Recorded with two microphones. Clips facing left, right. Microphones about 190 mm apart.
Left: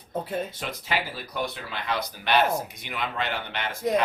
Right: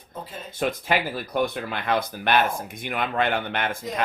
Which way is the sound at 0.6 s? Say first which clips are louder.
Right 6 dB; 50° right (ahead or behind).